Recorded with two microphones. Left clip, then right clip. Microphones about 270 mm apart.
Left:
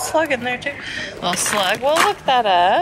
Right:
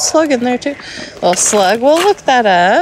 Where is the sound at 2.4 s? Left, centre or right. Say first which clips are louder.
Right 3 dB; right.